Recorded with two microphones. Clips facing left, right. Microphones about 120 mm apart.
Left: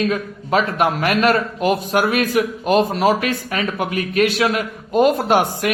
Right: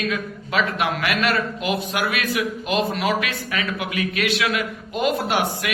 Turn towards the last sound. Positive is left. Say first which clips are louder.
# left 6 dB
turn(degrees=45)  # may be behind; listen again after turning